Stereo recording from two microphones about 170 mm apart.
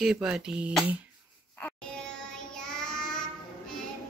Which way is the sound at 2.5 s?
5° left (ahead or behind).